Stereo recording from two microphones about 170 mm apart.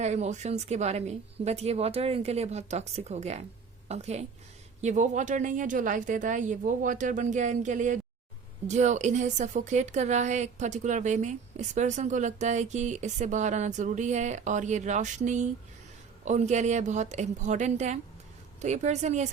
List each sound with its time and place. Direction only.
0.0 s a woman's voice: 40° right (ahead or behind)